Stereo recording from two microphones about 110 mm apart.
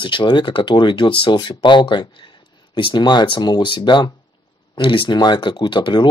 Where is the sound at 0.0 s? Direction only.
45° left (ahead or behind).